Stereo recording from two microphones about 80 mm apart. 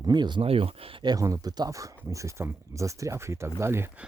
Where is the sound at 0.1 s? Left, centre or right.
Right.